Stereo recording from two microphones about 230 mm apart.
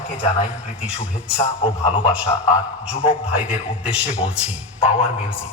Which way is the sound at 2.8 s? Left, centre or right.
Centre.